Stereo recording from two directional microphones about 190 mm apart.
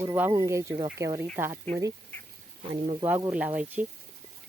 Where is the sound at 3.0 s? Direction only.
10° right (ahead or behind).